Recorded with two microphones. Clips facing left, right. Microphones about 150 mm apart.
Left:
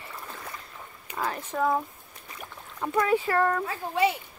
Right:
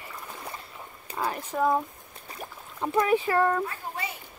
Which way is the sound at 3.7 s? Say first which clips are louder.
Left 10 dB; 90° left.